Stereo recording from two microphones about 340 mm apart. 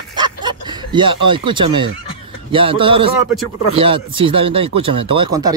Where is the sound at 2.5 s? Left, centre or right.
Centre.